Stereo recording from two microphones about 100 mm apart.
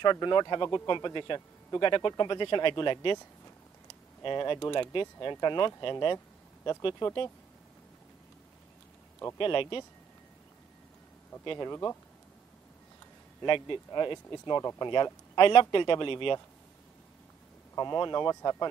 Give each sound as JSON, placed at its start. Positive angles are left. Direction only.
{"t": 0.0, "sound": "a man's voice", "side_deg": 50}
{"t": 4.2, "sound": "a man's voice", "side_deg": 50}
{"t": 9.4, "sound": "speech", "side_deg": 60}
{"t": 11.5, "sound": "speech", "side_deg": 35}
{"t": 13.5, "sound": "a man's voice", "side_deg": 55}
{"t": 15.3, "sound": "speech", "side_deg": 60}
{"t": 17.7, "sound": "speech", "side_deg": 45}